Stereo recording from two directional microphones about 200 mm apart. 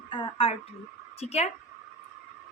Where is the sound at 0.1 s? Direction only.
25° left (ahead or behind).